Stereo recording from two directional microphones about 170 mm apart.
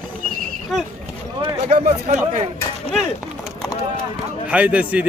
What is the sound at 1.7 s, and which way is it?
Speech, 40° right (ahead or behind).